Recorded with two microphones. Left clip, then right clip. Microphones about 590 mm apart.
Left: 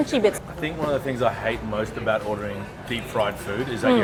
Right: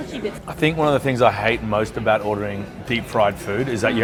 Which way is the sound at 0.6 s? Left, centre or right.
Right.